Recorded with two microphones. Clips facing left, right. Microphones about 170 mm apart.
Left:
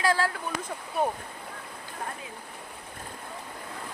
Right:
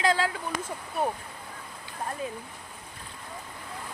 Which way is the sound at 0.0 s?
20° right (ahead or behind).